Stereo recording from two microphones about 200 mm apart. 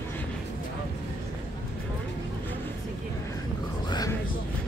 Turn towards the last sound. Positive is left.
turn(degrees=20)  # may be behind; listen again after turning